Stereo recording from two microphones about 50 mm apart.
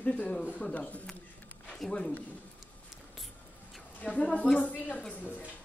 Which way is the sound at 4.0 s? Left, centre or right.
Left.